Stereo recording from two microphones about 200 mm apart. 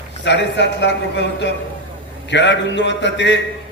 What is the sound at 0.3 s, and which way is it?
A man's voice, 60° left (ahead or behind).